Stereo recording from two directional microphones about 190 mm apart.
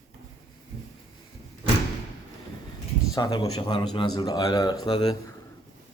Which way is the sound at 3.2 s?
20° left (ahead or behind).